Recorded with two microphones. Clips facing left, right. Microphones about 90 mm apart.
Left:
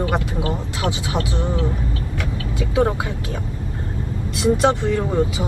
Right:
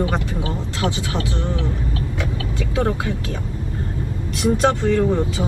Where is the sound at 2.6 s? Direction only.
20° left (ahead or behind).